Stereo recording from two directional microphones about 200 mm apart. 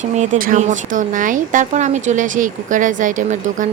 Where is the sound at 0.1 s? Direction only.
40° right (ahead or behind).